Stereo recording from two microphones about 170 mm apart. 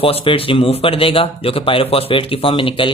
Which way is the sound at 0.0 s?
35° left (ahead or behind).